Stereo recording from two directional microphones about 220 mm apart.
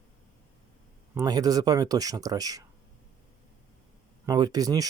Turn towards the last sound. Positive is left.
turn(degrees=-15)  # may be behind; listen again after turning